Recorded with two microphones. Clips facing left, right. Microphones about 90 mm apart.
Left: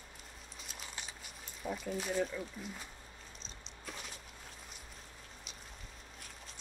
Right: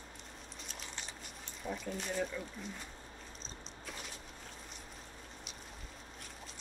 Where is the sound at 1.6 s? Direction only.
5° left (ahead or behind).